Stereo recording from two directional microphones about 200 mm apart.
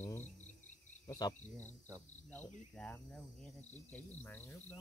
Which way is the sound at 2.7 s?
5° left (ahead or behind).